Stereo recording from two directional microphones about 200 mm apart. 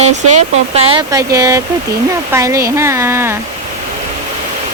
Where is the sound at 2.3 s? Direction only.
15° right (ahead or behind).